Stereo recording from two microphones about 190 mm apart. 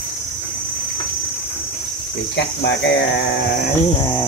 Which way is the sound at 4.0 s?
15° left (ahead or behind).